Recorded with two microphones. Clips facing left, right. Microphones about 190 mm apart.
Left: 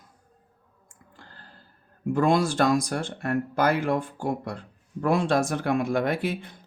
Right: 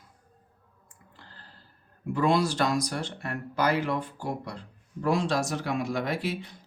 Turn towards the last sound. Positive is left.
turn(degrees=55)  # may be behind; listen again after turning